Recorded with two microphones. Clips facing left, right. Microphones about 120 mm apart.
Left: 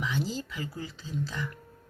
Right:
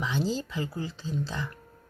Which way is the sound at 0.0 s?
30° right (ahead or behind).